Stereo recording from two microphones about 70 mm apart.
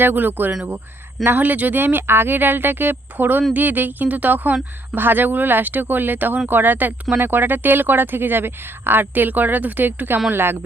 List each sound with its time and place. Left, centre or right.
0.0 s speech: right